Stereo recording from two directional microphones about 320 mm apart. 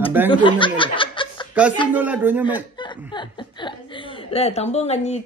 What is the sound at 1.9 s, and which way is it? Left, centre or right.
Speech, centre.